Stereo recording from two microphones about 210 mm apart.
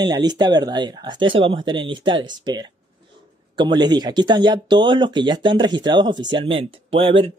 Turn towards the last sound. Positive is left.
turn(degrees=-25)  # may be behind; listen again after turning